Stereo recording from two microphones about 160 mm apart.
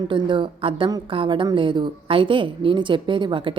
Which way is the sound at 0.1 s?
30° right (ahead or behind).